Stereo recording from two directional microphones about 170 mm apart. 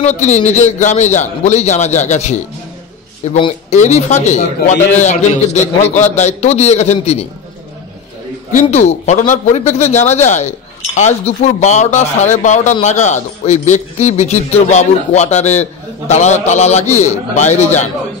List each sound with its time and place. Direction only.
0.0 s a man's voice: 40° left (ahead or behind)
8.5 s a man's voice: 40° left (ahead or behind)